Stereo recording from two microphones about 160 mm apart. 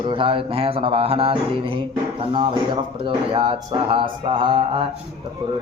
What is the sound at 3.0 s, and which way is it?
Speech, 30° right (ahead or behind).